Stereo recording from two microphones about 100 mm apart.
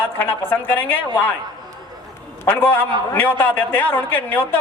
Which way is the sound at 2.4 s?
20° left (ahead or behind).